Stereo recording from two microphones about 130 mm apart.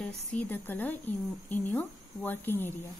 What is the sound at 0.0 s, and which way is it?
A woman's voice, 10° left (ahead or behind).